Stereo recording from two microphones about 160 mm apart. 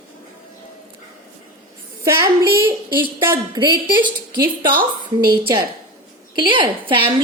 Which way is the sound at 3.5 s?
30° right (ahead or behind).